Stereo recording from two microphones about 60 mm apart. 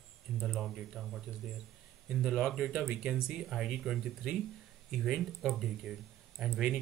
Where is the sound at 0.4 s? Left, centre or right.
Centre.